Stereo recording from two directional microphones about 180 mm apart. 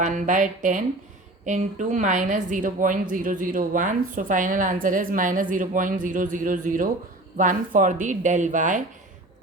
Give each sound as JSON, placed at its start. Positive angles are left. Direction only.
{"t": 0.0, "sound": "a woman's voice", "side_deg": -45}